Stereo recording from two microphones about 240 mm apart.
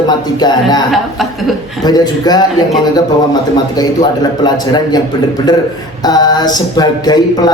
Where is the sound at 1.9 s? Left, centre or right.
Centre.